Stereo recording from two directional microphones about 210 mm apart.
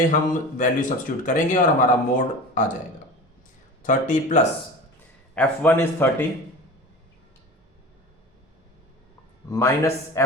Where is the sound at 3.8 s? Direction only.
35° left (ahead or behind).